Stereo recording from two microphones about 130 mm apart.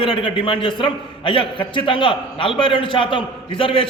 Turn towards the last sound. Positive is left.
turn(degrees=40)  # may be behind; listen again after turning